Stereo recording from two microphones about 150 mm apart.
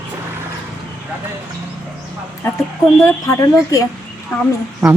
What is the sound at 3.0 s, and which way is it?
Speech, 20° left (ahead or behind).